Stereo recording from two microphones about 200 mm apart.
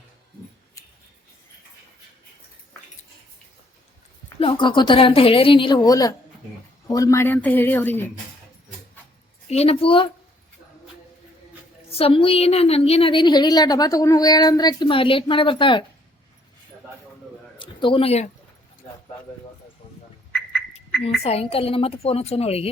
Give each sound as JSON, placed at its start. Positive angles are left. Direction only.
{"t": 4.4, "sound": "a woman's voice", "side_deg": 25}
{"t": 9.5, "sound": "a woman's voice", "side_deg": 30}
{"t": 11.9, "sound": "a woman's voice", "side_deg": 30}
{"t": 17.6, "sound": "a man's voice", "side_deg": 25}
{"t": 20.3, "sound": "frog", "side_deg": 5}
{"t": 21.2, "sound": "a woman's voice", "side_deg": 30}